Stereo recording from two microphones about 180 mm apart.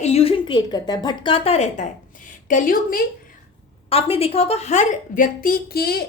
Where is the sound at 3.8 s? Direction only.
30° left (ahead or behind); by 6.0 s 60° left (ahead or behind).